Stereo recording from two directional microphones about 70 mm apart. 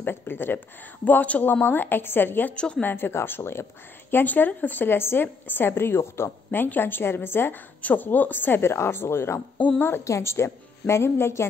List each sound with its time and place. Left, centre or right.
0.0 s a woman's voice: left
2.5 s a woman's voice: centre
2.8 s speech: left
10.0 s speech: left